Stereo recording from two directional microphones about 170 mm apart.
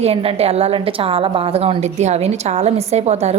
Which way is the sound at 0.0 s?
35° right (ahead or behind).